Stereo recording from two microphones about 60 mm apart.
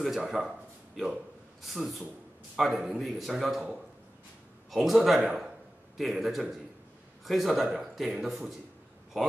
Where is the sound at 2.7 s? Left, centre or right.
Centre.